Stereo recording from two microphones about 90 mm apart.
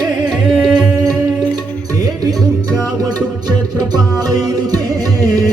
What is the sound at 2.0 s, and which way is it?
Music, 45° right (ahead or behind).